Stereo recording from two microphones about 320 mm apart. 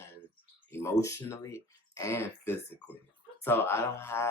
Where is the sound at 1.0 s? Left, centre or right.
Centre.